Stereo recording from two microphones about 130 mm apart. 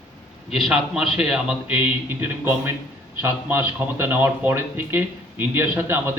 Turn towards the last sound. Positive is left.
turn(degrees=-15)  # may be behind; listen again after turning